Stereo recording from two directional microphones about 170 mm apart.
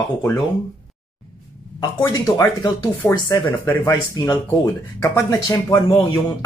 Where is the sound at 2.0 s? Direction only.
20° left (ahead or behind).